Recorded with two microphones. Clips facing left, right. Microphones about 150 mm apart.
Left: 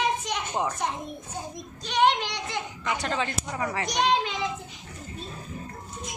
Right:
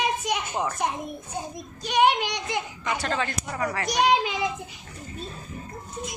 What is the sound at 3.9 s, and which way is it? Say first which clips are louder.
Speech: right 3 dB; 5° right (ahead or behind).